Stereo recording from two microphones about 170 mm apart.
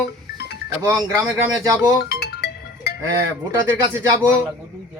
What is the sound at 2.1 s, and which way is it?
Music, 70° left (ahead or behind).